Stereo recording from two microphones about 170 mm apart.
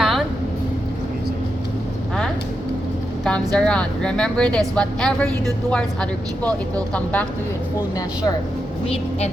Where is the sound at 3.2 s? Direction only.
5° left (ahead or behind).